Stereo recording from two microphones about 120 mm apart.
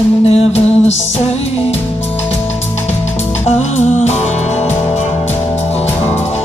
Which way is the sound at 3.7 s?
70° left (ahead or behind).